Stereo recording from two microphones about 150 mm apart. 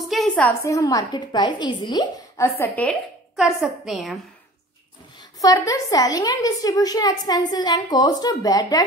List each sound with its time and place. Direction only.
0.0 s a sound: centre (ahead or behind)
0.7 s a woman's voice: 25° left (ahead or behind)
2.4 s a woman's voice: 15° left (ahead or behind)
3.3 s a woman's voice: centre (ahead or behind)
5.4 s a woman's voice: 25° left (ahead or behind)